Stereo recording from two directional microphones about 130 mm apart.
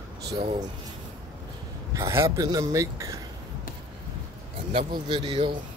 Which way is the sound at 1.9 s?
20° right (ahead or behind).